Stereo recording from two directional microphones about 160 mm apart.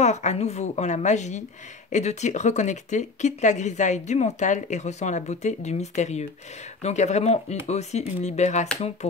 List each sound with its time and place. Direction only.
0.0 s speech: 45° left (ahead or behind)